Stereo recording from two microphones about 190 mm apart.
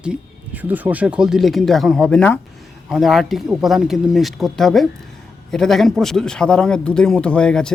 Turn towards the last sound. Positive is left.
turn(degrees=5)  # may be behind; listen again after turning